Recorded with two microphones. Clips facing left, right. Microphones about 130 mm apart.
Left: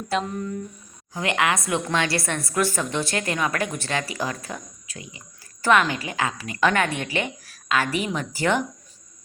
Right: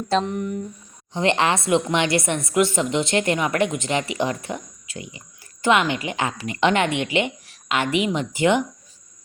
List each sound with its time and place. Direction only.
0.1 s a woman's voice: 25° right (ahead or behind)